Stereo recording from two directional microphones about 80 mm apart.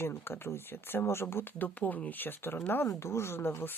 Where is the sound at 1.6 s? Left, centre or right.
Centre.